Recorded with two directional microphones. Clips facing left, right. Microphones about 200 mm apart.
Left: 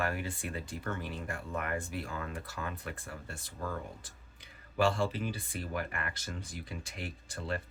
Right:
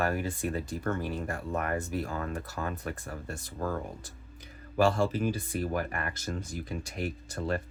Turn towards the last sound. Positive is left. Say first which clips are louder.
# right 6 dB
turn(degrees=-45)  # may be behind; listen again after turning